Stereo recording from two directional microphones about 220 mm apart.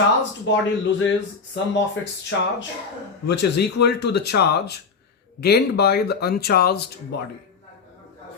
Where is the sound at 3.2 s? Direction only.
50° left (ahead or behind).